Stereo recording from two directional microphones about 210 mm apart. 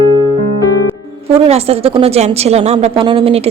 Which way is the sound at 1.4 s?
30° right (ahead or behind).